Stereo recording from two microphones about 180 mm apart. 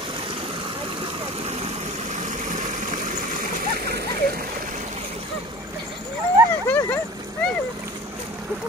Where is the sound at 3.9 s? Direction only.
60° right (ahead or behind).